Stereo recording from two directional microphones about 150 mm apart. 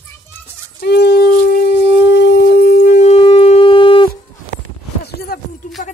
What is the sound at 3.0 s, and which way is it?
Shofar, 40° left (ahead or behind).